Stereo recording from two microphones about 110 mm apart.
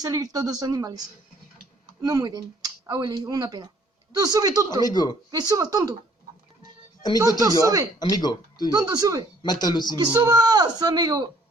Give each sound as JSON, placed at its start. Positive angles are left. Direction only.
{"t": 0.0, "sound": "speech", "side_deg": -35}
{"t": 4.9, "sound": "speech", "side_deg": 35}
{"t": 5.3, "sound": "speech", "side_deg": -35}
{"t": 7.2, "sound": "speech", "side_deg": -35}
{"t": 7.9, "sound": "speech", "side_deg": 40}
{"t": 8.7, "sound": "speech", "side_deg": -35}
{"t": 9.4, "sound": "speech", "side_deg": 40}
{"t": 9.9, "sound": "speech", "side_deg": -35}